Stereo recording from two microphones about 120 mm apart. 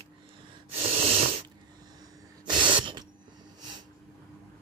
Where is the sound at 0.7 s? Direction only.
55° right (ahead or behind).